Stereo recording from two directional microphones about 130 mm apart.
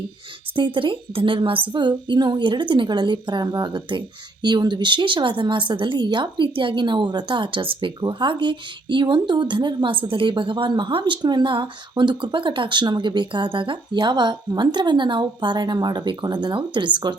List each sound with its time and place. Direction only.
0.5 s speech: 40° right (ahead or behind)